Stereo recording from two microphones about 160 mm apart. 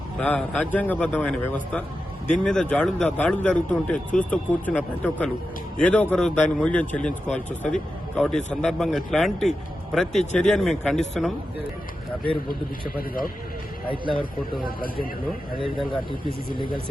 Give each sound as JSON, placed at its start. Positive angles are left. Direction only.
{"t": 0.2, "sound": "a man's voice", "side_deg": 5}
{"t": 12.5, "sound": "a man's voice", "side_deg": 65}
{"t": 14.6, "sound": "a man's voice", "side_deg": 65}